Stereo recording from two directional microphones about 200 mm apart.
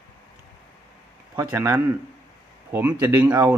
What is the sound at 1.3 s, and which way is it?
Speech, 10° right (ahead or behind).